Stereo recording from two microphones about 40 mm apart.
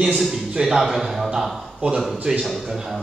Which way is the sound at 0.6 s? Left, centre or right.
Centre.